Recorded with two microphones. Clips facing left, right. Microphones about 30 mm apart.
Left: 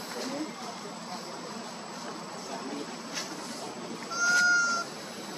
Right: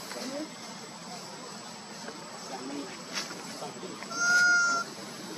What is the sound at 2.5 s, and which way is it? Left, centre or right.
Speech, centre.